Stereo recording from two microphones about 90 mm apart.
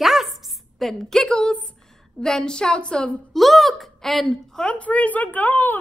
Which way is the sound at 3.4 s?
Centre (ahead or behind).